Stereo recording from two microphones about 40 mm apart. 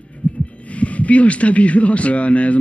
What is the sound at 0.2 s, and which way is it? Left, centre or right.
Heart sounds, left.